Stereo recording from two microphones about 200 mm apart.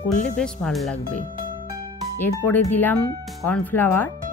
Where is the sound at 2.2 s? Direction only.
10° left (ahead or behind).